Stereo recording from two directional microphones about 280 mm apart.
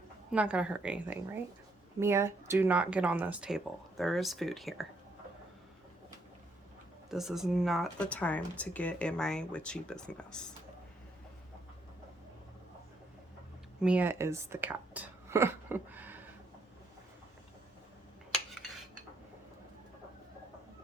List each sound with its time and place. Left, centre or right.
0.3 s speech: centre
7.1 s speech: centre
13.8 s speech: centre